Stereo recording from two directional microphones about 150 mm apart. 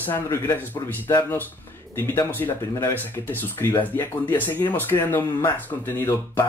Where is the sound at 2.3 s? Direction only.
15° left (ahead or behind).